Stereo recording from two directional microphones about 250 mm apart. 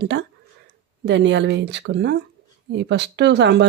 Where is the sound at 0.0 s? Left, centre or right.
Right.